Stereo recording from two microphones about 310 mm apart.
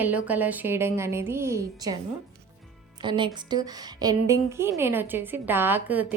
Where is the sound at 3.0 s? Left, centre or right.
Centre.